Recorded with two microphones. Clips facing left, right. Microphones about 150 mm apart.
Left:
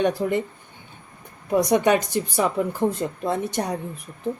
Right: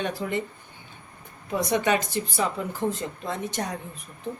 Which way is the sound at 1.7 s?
55° left (ahead or behind).